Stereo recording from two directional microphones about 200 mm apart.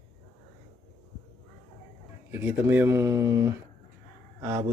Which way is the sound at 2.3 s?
10° right (ahead or behind).